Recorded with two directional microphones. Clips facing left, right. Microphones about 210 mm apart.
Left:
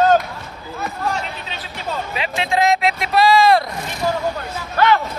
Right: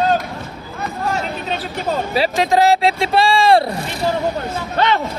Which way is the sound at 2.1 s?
40° right (ahead or behind).